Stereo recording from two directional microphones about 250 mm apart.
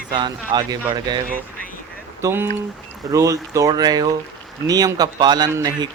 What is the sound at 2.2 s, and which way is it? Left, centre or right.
A man's voice, centre.